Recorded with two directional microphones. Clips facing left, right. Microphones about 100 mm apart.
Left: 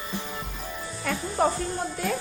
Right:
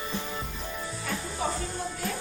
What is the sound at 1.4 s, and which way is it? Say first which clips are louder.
Music: left 8 dB; 55° left (ahead or behind).